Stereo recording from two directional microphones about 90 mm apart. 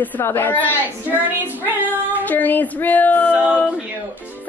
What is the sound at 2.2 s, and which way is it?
Speech, 20° left (ahead or behind).